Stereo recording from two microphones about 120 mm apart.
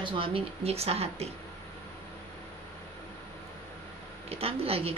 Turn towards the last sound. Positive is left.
turn(degrees=-55)  # may be behind; listen again after turning